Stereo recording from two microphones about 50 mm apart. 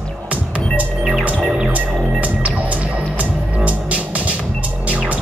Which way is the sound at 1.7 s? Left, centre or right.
Right.